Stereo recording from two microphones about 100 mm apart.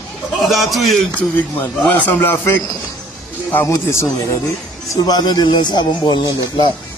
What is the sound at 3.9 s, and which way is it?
Speech, 30° left (ahead or behind).